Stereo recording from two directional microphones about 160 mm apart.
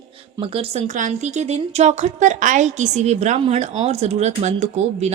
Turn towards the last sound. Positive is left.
turn(degrees=-45)  # may be behind; listen again after turning